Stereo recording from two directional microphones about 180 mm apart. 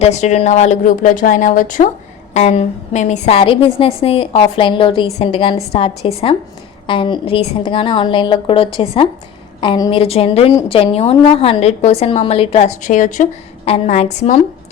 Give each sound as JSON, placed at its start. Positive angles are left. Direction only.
{"t": 0.0, "sound": "a woman's voice", "side_deg": 40}
{"t": 10.0, "sound": "a woman's voice", "side_deg": 35}